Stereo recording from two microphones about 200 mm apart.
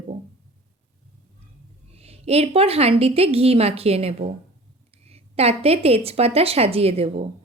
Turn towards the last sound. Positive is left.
turn(degrees=-30)  # may be behind; listen again after turning